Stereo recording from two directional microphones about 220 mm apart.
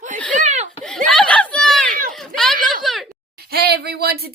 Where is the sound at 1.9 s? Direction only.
40° right (ahead or behind).